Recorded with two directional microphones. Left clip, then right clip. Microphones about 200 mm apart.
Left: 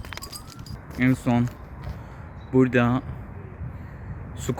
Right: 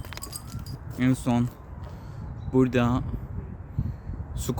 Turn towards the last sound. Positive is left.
turn(degrees=0)  # may be behind; listen again after turning